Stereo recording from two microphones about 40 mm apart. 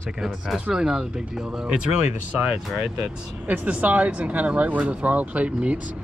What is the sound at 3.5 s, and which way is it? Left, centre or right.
Speech, right.